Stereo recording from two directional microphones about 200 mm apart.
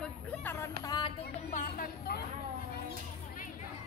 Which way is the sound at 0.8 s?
20° left (ahead or behind).